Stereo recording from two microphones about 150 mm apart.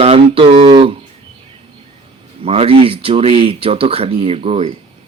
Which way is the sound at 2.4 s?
40° right (ahead or behind).